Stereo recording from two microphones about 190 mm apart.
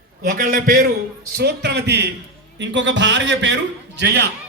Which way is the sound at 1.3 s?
60° right (ahead or behind).